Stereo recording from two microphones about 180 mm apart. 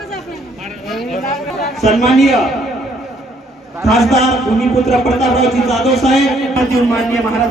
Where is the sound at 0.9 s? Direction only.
Centre (ahead or behind).